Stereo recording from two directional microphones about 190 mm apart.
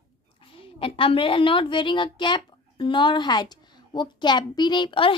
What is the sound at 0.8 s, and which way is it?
A woman's voice, 30° left (ahead or behind).